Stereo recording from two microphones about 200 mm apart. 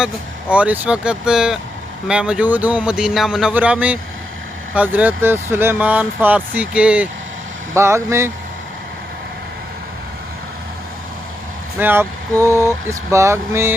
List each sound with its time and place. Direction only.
0.5 s speech: 5° right (ahead or behind)
11.8 s speech: 10° right (ahead or behind)